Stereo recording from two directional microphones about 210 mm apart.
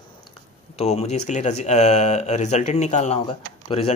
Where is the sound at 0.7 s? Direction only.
30° left (ahead or behind).